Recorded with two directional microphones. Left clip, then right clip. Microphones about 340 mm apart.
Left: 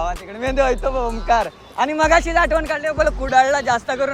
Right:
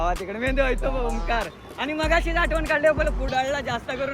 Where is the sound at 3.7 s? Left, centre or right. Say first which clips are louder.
Left 8 dB; centre.